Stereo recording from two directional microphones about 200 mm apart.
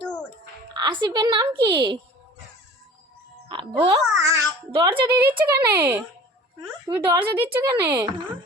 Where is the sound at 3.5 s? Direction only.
25° right (ahead or behind).